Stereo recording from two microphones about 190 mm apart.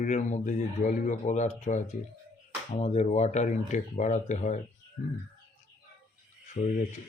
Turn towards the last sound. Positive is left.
turn(degrees=35)  # may be behind; listen again after turning